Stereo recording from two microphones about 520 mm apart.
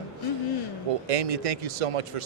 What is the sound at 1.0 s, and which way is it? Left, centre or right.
Speech, right.